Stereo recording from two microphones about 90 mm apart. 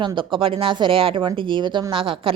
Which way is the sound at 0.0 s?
65° right (ahead or behind).